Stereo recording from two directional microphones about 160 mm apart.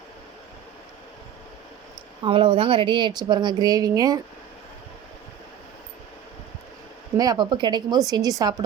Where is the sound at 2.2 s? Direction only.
35° right (ahead or behind).